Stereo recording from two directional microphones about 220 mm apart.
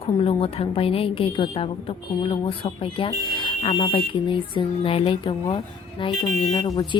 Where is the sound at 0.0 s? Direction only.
25° left (ahead or behind).